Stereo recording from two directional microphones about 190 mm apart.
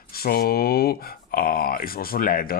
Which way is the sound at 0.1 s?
55° left (ahead or behind).